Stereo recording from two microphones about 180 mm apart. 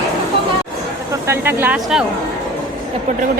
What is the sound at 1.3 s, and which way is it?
Speech, 10° right (ahead or behind).